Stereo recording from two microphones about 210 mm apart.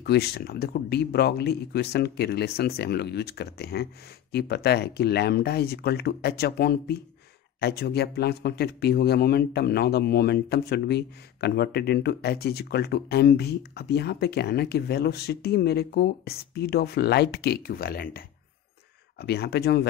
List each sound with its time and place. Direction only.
0.0 s speech: 50° left (ahead or behind)